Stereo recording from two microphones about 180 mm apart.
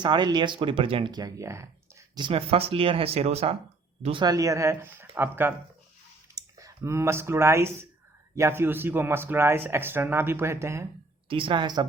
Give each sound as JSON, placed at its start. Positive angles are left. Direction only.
{"t": 0.0, "sound": "speech", "side_deg": -25}
{"t": 11.3, "sound": "speech", "side_deg": -30}